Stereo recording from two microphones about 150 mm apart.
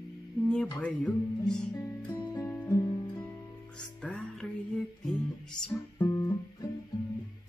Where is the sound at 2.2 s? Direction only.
25° left (ahead or behind).